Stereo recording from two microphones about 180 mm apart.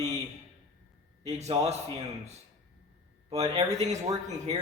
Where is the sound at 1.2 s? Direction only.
35° right (ahead or behind).